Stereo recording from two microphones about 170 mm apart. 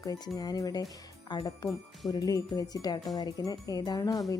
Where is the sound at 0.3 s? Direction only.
20° left (ahead or behind).